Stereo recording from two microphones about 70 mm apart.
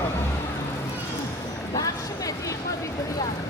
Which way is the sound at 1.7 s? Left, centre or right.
Left.